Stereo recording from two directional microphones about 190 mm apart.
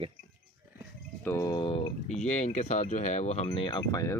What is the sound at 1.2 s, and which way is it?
Speech, 15° left (ahead or behind).